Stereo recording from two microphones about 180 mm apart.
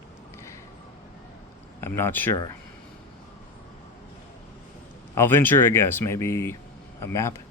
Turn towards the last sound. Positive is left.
turn(degrees=15)  # may be behind; listen again after turning